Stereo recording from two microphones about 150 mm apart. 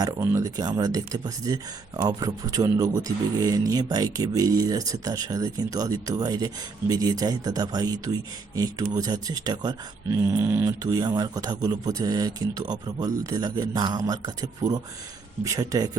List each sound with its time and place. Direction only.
0.0 s speech: 20° right (ahead or behind)